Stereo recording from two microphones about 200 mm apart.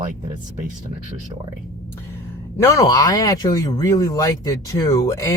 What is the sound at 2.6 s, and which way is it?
Speech, 15° left (ahead or behind).